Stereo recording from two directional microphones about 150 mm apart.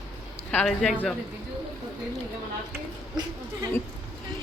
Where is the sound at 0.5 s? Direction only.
5° left (ahead or behind).